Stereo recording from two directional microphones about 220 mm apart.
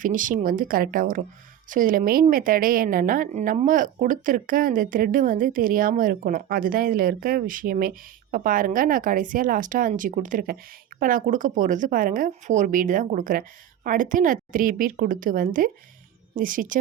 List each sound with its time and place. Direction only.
0.0 s a woman's voice: 35° right (ahead or behind)